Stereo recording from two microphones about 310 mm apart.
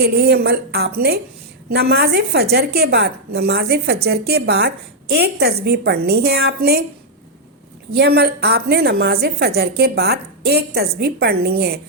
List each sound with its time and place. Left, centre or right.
0.0 s a woman's voice: right
7.9 s a woman's voice: right